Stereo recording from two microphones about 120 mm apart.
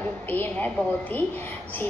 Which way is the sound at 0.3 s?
15° left (ahead or behind).